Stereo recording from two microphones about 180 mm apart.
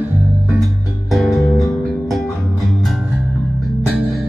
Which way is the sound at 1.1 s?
Centre (ahead or behind).